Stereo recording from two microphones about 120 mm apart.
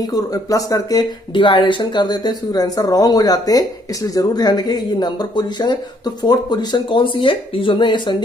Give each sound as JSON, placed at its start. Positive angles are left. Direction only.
{"t": 0.0, "sound": "speech", "side_deg": 30}